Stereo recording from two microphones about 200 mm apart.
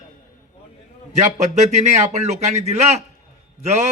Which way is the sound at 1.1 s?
35° right (ahead or behind).